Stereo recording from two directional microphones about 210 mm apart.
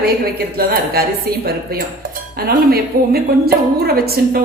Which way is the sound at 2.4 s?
45° right (ahead or behind).